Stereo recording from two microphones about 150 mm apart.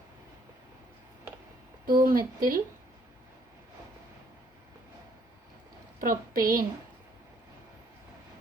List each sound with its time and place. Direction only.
1.9 s a woman's voice: 70° right (ahead or behind)
6.0 s a woman's voice: 70° right (ahead or behind)